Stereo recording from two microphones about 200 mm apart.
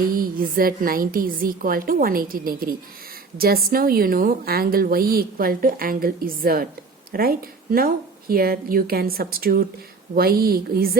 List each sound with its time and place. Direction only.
0.1 s a woman's voice: 45° right (ahead or behind)